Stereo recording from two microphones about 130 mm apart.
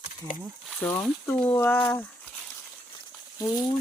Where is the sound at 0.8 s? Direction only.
15° left (ahead or behind).